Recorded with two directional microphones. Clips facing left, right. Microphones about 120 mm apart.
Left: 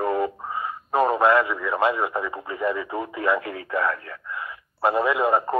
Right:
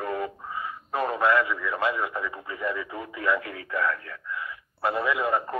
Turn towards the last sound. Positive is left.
turn(degrees=30)  # may be behind; listen again after turning